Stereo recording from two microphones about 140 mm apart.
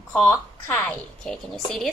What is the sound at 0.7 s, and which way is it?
A woman's voice, 5° left (ahead or behind).